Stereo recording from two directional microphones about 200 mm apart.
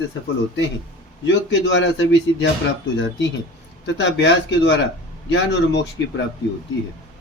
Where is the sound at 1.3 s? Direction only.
65° left (ahead or behind).